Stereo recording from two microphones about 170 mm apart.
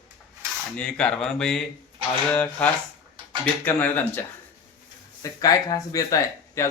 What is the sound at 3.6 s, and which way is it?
Speech, 10° left (ahead or behind).